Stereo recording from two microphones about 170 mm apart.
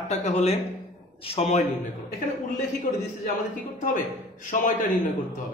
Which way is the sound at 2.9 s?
40° left (ahead or behind).